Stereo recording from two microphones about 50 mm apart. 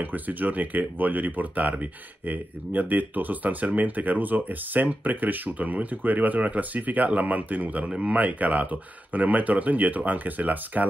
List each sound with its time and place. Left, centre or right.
0.0 s speech: right
7.9 s speech: right